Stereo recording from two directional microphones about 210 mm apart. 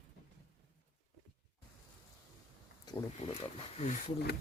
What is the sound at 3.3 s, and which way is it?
Speech, 30° left (ahead or behind).